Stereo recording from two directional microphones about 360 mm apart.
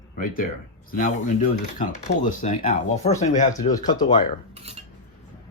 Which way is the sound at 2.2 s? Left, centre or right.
Left.